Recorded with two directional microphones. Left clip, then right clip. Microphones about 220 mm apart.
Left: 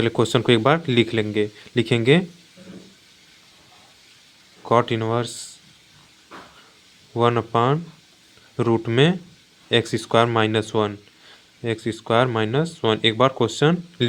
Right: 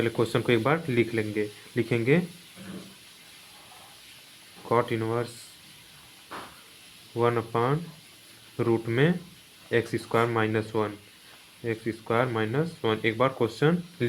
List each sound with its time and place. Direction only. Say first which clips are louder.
0.0 s speech: left 6 dB; 50° left (ahead or behind)
4.7 s speech: left 6 dB; 50° left (ahead or behind)
7.1 s speech: left 6 dB; 50° left (ahead or behind)